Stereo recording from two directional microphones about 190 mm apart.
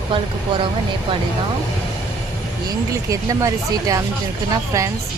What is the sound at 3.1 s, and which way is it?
Speech, 15° right (ahead or behind).